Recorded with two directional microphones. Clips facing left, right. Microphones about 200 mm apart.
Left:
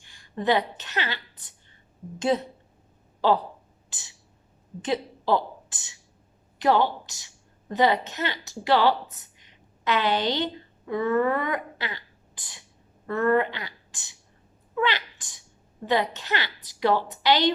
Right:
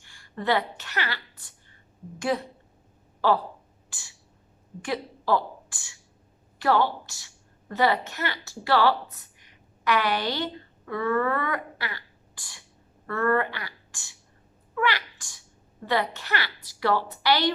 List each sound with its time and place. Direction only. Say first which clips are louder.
0.0 s a woman's voice: left 3 dB; 20° left (ahead or behind)
3.8 s a sound: even; 20° left (ahead or behind)
4.8 s a woman's voice: left 3 dB; 20° left (ahead or behind)
14.8 s sneeze: left 1 dB; 20° left (ahead or behind)
15.9 s a woman's voice: left 2 dB; 20° left (ahead or behind)